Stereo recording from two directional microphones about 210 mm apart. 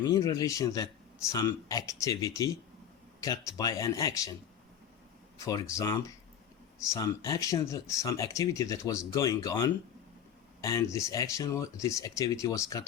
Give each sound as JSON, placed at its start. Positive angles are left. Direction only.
{"t": 0.0, "sound": "speech", "side_deg": 15}
{"t": 5.5, "sound": "speech", "side_deg": 15}